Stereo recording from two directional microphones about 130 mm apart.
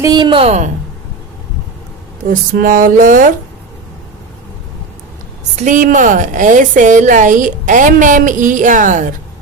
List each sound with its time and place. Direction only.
0.0 s a woman's voice: 35° right (ahead or behind); by 0.7 s 55° right (ahead or behind)
2.2 s a sound: 90° right
5.5 s a woman's voice: 80° right